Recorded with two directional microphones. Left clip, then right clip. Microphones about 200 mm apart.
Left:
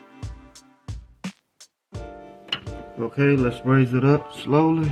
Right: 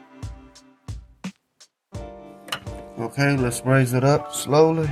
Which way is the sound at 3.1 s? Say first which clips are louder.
Left 2 dB; 50° right (ahead or behind).